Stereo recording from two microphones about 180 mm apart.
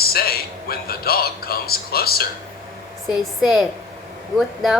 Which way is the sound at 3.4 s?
Centre (ahead or behind).